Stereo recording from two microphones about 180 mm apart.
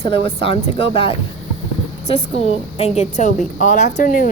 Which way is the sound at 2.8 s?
35° left (ahead or behind).